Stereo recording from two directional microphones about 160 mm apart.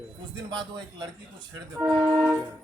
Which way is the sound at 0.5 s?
30° right (ahead or behind).